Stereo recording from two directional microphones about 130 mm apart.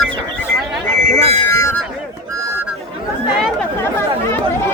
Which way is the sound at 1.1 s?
55° right (ahead or behind).